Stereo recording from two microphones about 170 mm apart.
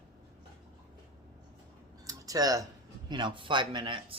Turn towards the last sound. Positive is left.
turn(degrees=-30)  # may be behind; listen again after turning